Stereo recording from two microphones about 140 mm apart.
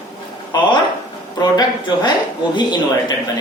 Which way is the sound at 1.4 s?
30° left (ahead or behind).